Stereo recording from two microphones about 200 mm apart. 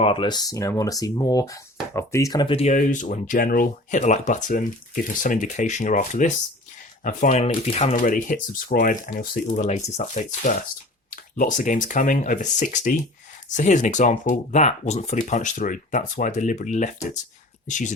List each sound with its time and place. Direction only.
0.0 s speech: 25° left (ahead or behind)